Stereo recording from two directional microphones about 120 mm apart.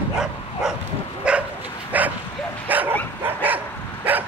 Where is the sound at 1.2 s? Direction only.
10° right (ahead or behind).